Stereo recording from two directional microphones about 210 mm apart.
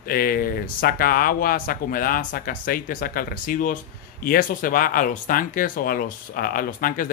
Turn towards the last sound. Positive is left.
turn(degrees=40)  # may be behind; listen again after turning